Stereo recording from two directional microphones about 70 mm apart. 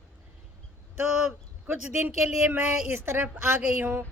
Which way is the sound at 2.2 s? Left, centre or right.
Centre.